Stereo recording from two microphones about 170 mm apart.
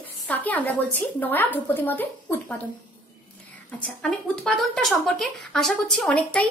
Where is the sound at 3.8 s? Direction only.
5° left (ahead or behind).